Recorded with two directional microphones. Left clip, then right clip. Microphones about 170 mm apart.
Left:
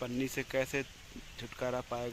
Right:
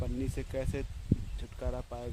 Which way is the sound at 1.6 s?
30° left (ahead or behind).